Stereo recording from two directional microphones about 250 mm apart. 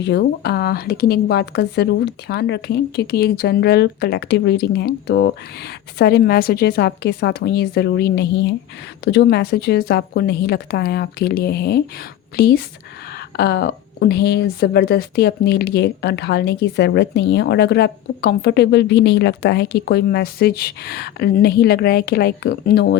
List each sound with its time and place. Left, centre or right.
0.0 s a woman's voice: left